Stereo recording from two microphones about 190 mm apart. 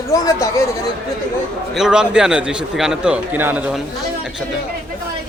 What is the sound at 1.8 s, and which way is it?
A man's voice, 5° right (ahead or behind).